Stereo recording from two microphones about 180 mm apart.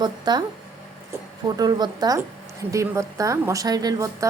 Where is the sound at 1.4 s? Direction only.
20° right (ahead or behind).